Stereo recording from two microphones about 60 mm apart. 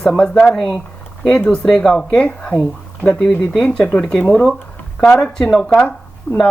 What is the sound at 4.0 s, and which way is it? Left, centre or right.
Speech, centre.